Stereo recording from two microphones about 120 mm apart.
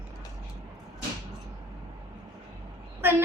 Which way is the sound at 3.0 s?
20° right (ahead or behind).